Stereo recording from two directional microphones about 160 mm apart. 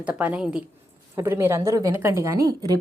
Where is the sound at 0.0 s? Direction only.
10° right (ahead or behind).